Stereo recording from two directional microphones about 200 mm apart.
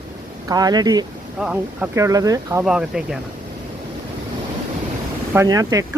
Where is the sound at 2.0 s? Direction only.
15° right (ahead or behind).